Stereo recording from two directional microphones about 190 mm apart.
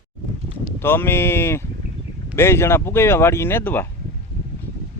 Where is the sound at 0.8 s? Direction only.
10° left (ahead or behind).